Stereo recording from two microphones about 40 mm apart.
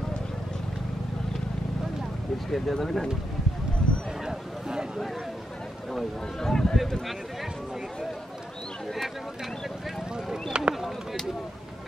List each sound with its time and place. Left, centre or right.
2.5 s speech: centre
4.2 s a sound: centre
6.4 s speech: centre
10.5 s speech: right